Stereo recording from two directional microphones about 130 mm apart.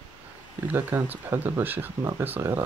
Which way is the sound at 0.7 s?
15° right (ahead or behind).